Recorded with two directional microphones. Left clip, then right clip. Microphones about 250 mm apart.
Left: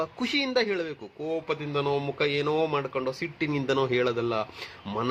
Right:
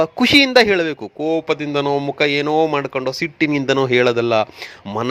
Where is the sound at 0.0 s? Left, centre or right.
Right.